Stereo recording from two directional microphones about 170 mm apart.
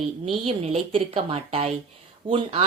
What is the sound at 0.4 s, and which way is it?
A woman's voice, 35° right (ahead or behind).